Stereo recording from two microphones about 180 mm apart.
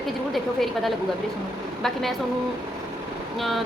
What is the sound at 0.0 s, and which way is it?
A woman's voice, centre (ahead or behind).